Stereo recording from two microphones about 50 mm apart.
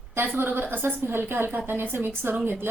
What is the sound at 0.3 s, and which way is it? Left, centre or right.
Speech, right.